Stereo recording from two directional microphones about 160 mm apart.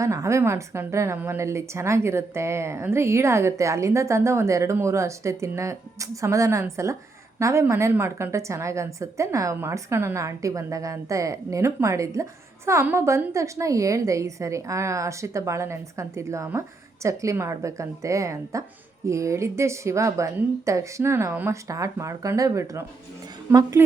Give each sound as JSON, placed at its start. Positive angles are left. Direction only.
{"t": 0.0, "sound": "a woman's voice", "side_deg": -20}